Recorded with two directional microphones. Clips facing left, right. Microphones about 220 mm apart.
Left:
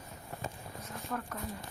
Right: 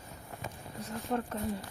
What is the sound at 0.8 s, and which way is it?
Speech, 30° right (ahead or behind).